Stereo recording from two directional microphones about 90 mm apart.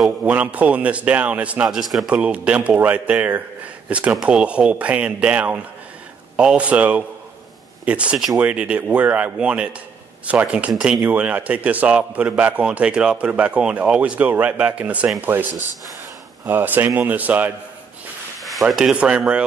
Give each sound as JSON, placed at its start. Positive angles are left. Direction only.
{"t": 0.2, "sound": "a man's voice", "side_deg": -15}
{"t": 1.7, "sound": "a man's voice", "side_deg": 0}
{"t": 18.4, "sound": "speech", "side_deg": 0}